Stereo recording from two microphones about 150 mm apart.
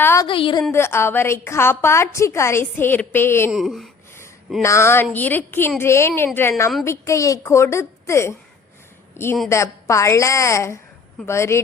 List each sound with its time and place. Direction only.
0.0 s a sound: 15° left (ahead or behind)
0.3 s a woman's voice: 35° left (ahead or behind)
0.7 s a woman's voice: 15° left (ahead or behind)
3.5 s speech: centre (ahead or behind)
4.6 s a woman's voice: 20° left (ahead or behind)